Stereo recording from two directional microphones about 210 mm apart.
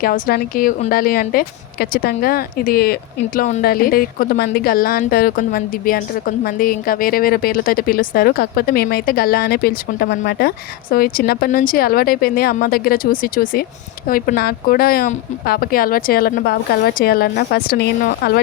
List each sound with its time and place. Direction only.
0.0 s a woman's voice: 45° left (ahead or behind)